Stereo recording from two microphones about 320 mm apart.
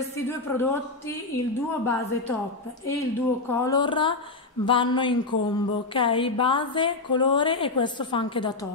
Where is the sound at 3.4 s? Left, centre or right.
Centre.